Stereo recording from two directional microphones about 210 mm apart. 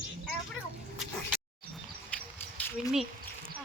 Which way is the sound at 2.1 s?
5° left (ahead or behind).